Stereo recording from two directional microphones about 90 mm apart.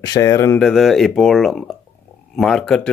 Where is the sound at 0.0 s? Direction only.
40° left (ahead or behind).